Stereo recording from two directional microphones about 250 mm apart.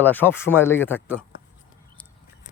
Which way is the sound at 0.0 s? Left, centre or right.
Centre.